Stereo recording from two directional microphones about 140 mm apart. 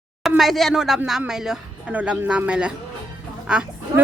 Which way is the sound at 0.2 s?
Centre (ahead or behind).